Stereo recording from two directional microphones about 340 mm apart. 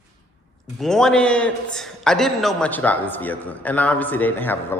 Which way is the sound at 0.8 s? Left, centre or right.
Centre.